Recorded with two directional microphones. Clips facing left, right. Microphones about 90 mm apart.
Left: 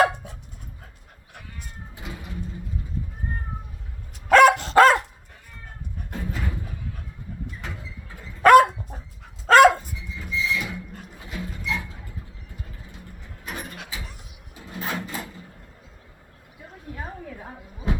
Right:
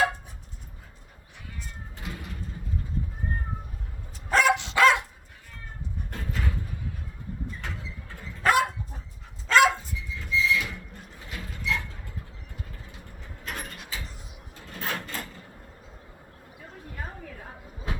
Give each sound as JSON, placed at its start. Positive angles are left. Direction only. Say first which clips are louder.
{"t": 2.0, "sound": "music", "louder": "left 1 dB", "side_deg": 5}
{"t": 4.3, "sound": "dog", "louder": "left 8 dB", "side_deg": 65}
{"t": 4.5, "sound": "dog", "louder": "left 5 dB", "side_deg": 45}
{"t": 6.1, "sound": "a sound", "louder": "left 3 dB", "side_deg": 5}
{"t": 8.4, "sound": "dog", "louder": "left 11 dB", "side_deg": 65}
{"t": 9.5, "sound": "dog", "louder": "left 7 dB", "side_deg": 50}
{"t": 10.2, "sound": "music", "louder": "right 1 dB", "side_deg": 5}
{"t": 11.3, "sound": "mechanisms", "louder": "left 1 dB", "side_deg": 5}
{"t": 13.4, "sound": "a sound", "louder": "left 2 dB", "side_deg": 10}
{"t": 14.5, "sound": "printer", "louder": "left 3 dB", "side_deg": 5}
{"t": 17.0, "sound": "a sound", "louder": "left 3 dB", "side_deg": 15}